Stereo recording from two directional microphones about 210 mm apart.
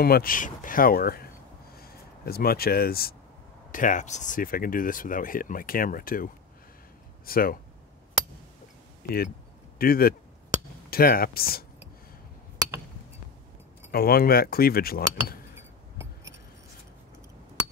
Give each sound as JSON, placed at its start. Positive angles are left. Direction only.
{"t": 0.0, "sound": "speech", "side_deg": 45}
{"t": 7.2, "sound": "speech", "side_deg": 45}
{"t": 9.8, "sound": "speech", "side_deg": 45}
{"t": 13.9, "sound": "speech", "side_deg": 45}